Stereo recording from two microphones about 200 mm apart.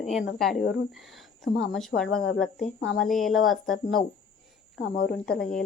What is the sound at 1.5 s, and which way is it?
Speech, centre (ahead or behind).